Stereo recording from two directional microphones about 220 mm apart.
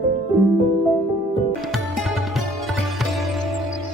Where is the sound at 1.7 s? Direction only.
Centre (ahead or behind).